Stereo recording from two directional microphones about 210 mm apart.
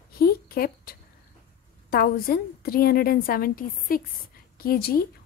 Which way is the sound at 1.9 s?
45° left (ahead or behind).